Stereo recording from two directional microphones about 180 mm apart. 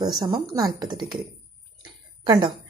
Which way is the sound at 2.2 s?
25° right (ahead or behind).